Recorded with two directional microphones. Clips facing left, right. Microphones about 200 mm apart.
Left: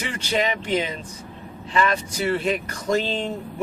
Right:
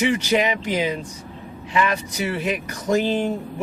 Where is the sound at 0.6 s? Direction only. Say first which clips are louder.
Right 1 dB; 10° right (ahead or behind).